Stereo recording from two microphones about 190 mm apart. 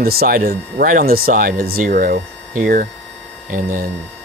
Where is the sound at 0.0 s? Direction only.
50° right (ahead or behind).